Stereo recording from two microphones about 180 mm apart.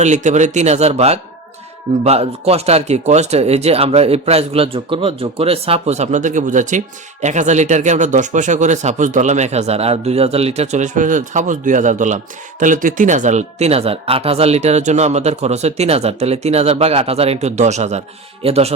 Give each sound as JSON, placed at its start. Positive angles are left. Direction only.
{"t": 0.0, "sound": "speech", "side_deg": -40}